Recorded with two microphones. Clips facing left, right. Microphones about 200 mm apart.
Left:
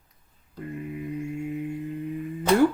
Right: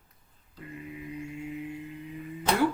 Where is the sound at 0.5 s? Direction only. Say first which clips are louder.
Left 7 dB; 50° left (ahead or behind).